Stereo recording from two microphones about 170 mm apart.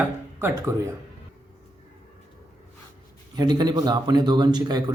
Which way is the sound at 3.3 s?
25° right (ahead or behind).